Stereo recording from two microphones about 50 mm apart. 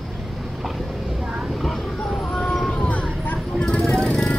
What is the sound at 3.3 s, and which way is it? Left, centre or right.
Vehicle, centre.